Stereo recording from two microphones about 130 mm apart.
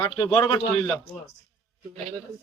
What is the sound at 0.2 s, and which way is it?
Speech, 35° left (ahead or behind).